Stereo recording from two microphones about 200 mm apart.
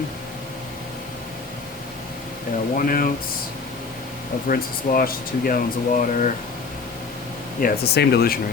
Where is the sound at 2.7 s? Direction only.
45° left (ahead or behind).